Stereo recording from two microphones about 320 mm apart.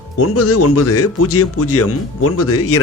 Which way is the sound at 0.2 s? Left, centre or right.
Left.